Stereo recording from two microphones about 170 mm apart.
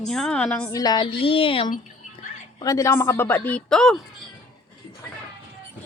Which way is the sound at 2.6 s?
20° left (ahead or behind).